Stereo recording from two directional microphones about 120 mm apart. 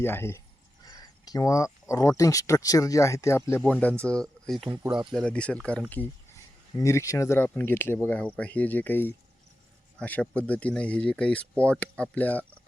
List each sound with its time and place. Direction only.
0.0 s speech: 20° left (ahead or behind)
0.9 s speech: 30° left (ahead or behind); by 5.0 s 5° right (ahead or behind)
5.1 s speech: 10° left (ahead or behind)
6.3 s speech: 25° left (ahead or behind)